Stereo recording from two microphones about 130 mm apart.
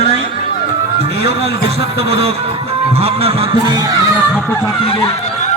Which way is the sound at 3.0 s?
50° right (ahead or behind).